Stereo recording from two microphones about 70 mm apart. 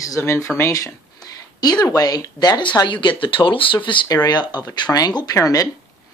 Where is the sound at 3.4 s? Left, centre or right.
Left.